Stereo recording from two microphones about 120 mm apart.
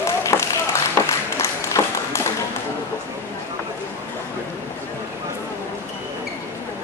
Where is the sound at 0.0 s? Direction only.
25° left (ahead or behind).